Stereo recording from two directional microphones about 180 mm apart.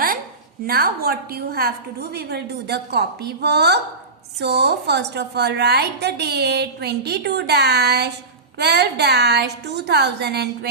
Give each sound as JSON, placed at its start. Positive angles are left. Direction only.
{"t": 0.7, "sound": "a woman's voice", "side_deg": -60}